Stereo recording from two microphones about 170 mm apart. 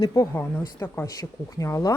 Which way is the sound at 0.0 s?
20° left (ahead or behind).